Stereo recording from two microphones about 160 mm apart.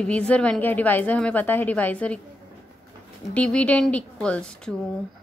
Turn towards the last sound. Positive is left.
turn(degrees=5)  # may be behind; listen again after turning